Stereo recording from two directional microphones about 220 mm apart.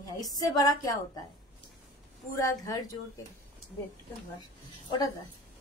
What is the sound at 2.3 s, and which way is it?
Speech, 15° left (ahead or behind).